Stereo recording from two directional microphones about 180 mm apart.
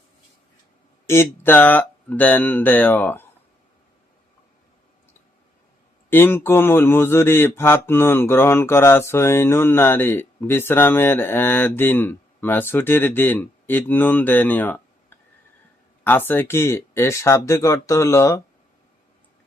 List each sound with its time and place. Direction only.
1.0 s speech: 15° left (ahead or behind)
6.1 s speech: 10° left (ahead or behind)